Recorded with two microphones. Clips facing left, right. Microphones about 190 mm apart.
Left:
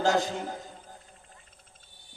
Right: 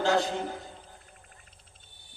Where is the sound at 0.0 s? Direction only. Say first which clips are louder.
Even; 40° left (ahead or behind).